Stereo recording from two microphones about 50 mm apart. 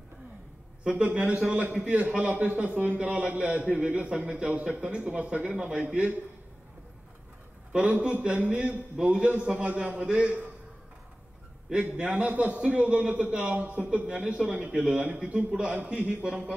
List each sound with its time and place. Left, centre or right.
0.8 s a man's voice: centre
8.0 s speech: centre
11.7 s speech: right
13.7 s speech: right
14.0 s a man's voice: centre
14.6 s speech: right